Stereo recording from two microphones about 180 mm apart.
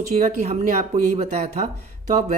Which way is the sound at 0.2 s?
40° right (ahead or behind).